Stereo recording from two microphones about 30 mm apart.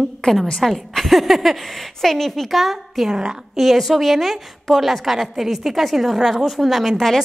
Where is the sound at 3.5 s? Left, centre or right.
Centre.